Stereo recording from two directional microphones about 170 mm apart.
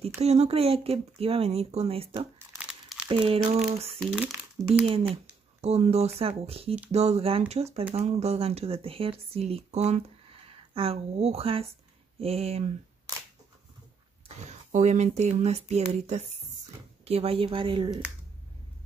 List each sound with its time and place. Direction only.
0.2 s speech: 40° right (ahead or behind)
2.3 s crumpling: 10° right (ahead or behind)
3.1 s speech: 35° right (ahead or behind)
4.0 s speech: 5° right (ahead or behind)
4.8 s speech: 35° right (ahead or behind)
14.2 s speech: 45° right (ahead or behind); by 18.0 s 25° right (ahead or behind)